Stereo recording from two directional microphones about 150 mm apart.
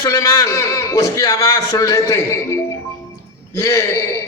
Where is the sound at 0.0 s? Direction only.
20° left (ahead or behind).